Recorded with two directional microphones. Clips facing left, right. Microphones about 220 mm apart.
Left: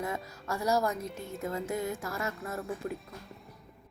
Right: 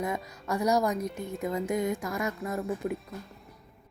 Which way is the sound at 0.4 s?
15° right (ahead or behind).